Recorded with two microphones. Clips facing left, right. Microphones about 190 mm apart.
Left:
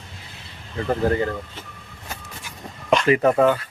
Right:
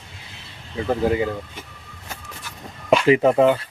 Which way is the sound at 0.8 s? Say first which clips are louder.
Right 1 dB; 10° right (ahead or behind).